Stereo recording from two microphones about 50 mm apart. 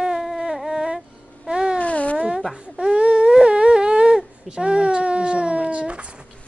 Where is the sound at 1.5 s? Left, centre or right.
Centre.